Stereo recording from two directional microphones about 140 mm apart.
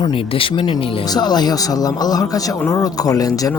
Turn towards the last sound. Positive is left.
turn(degrees=25)  # may be behind; listen again after turning